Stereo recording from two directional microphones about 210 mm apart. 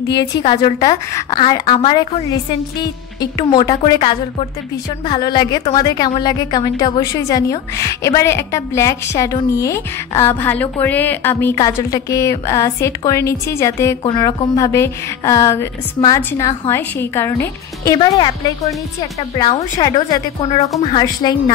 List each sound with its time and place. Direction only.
0.4 s a woman's voice: 20° left (ahead or behind)